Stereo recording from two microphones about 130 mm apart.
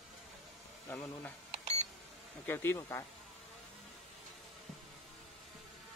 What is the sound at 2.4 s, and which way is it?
Speech, 15° left (ahead or behind).